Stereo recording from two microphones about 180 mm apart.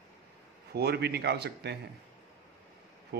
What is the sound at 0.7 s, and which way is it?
A man's voice, 65° right (ahead or behind).